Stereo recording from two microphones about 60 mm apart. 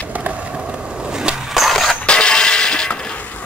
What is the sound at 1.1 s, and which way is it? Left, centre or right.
Skateboard, centre.